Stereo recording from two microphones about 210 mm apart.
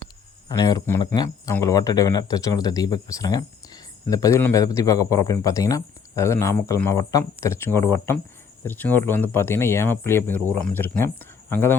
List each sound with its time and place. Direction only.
0.4 s speech: 15° left (ahead or behind)